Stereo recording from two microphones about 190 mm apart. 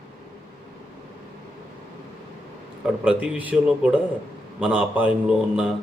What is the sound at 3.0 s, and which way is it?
A man's voice, 5° right (ahead or behind).